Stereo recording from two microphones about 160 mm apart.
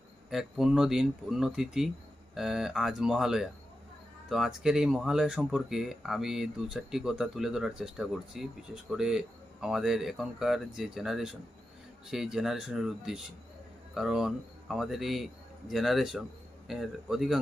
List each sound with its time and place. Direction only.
0.3 s a man's voice: centre (ahead or behind)